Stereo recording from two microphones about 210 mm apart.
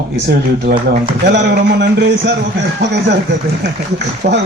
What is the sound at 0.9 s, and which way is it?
Speech, 50° right (ahead or behind).